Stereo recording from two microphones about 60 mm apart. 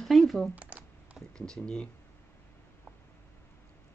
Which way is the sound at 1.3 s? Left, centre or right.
Centre.